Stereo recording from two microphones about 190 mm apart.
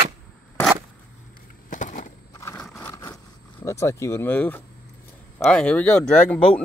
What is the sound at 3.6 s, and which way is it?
Speech, 15° left (ahead or behind).